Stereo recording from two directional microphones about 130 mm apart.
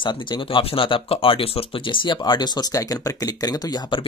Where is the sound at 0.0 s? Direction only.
40° left (ahead or behind).